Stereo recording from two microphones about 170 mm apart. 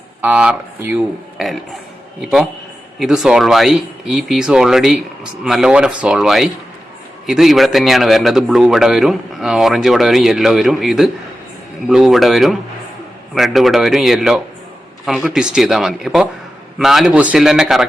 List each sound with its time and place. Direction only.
0.2 s a man's voice: 5° right (ahead or behind)
3.0 s a man's voice: centre (ahead or behind)